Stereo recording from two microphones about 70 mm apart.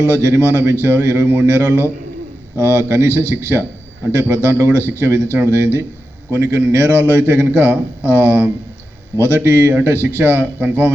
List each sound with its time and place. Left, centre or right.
0.0 s a man's voice: right